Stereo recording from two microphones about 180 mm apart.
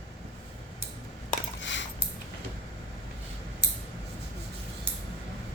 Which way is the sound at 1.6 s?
90° left.